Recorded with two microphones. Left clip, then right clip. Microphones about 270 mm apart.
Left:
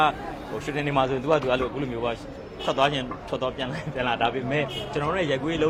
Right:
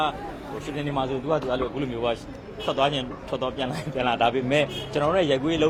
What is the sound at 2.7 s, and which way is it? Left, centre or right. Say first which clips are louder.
A man's voice: left 1 dB; centre.